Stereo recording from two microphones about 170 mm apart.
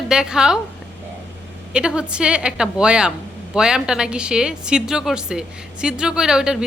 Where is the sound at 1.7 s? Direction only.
5° right (ahead or behind).